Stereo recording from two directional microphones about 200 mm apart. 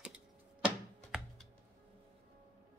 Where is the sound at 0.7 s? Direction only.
Centre (ahead or behind).